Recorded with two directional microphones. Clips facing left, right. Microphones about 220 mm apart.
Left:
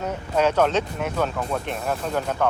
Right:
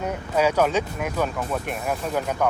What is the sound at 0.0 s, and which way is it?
Speech, 10° right (ahead or behind).